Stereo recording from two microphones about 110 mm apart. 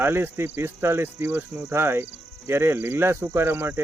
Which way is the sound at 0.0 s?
20° right (ahead or behind).